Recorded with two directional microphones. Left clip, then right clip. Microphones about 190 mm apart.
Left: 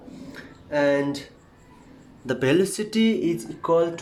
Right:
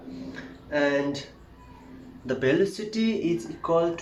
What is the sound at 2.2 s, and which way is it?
Speech, 50° left (ahead or behind).